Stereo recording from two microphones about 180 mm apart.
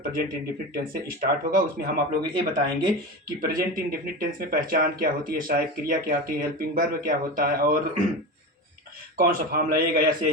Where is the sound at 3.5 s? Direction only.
55° right (ahead or behind).